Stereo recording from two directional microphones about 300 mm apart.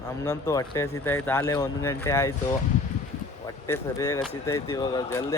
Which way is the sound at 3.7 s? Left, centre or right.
Centre.